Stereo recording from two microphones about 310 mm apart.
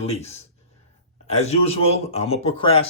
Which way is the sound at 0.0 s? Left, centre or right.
Centre.